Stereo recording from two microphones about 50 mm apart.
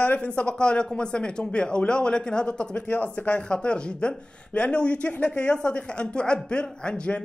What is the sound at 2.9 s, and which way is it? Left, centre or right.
Speech, left.